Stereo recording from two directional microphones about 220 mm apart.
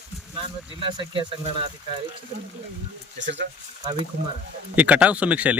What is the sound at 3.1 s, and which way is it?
Speech, 55° right (ahead or behind).